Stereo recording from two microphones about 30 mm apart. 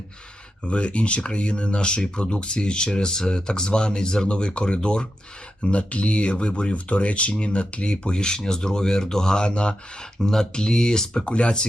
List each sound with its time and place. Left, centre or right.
0.6 s speech: left
6.7 s speech: left
10.2 s speech: centre
10.5 s speech: left
11.3 s speech: left